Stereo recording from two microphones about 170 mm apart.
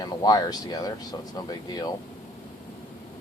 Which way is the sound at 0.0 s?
20° left (ahead or behind).